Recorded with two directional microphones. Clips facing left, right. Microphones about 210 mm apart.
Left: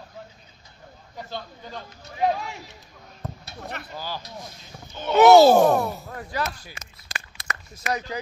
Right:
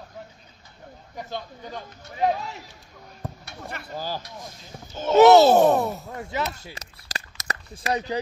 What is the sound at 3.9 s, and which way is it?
Vehicle, 40° right (ahead or behind).